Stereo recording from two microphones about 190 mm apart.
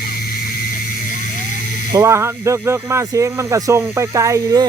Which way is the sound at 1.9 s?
15° right (ahead or behind).